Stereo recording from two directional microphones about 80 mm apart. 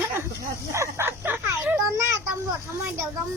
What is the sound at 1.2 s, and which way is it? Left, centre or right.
Speech, right.